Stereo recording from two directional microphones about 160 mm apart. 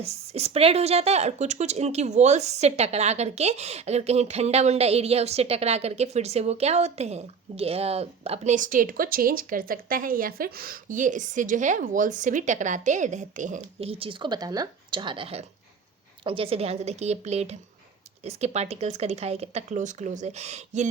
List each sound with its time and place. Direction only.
0.0 s a woman's voice: 40° right (ahead or behind)